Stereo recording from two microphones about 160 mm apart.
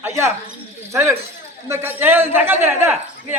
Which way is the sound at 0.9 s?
15° right (ahead or behind).